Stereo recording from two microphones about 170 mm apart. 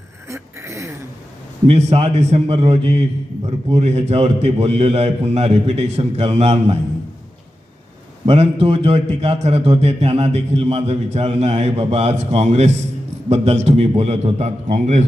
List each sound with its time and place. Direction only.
0.3 s a sound: 15° right (ahead or behind)
1.6 s a man's voice: 35° right (ahead or behind)
8.3 s a man's voice: 35° right (ahead or behind)